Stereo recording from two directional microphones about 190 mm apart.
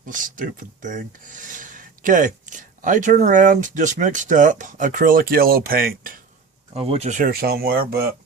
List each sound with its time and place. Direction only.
0.0 s speech: 45° right (ahead or behind)
6.7 s speech: 30° right (ahead or behind); by 7.9 s 50° right (ahead or behind)